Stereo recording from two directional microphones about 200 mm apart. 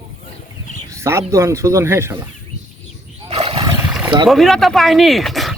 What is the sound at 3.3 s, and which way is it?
Roar, 30° right (ahead or behind).